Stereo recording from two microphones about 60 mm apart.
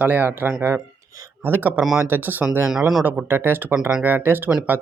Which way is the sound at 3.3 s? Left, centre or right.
Right.